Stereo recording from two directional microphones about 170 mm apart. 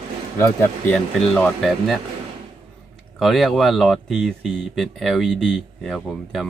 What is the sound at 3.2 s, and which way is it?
Speech, centre (ahead or behind).